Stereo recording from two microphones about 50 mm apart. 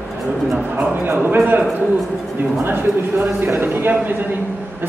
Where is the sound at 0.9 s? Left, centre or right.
Right.